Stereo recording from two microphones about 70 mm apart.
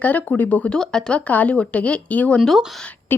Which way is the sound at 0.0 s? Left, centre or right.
Left.